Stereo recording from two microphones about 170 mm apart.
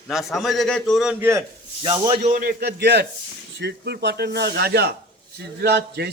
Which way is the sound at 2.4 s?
70° right (ahead or behind).